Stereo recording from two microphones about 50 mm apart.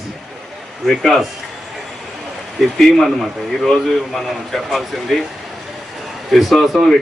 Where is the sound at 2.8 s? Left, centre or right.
Centre.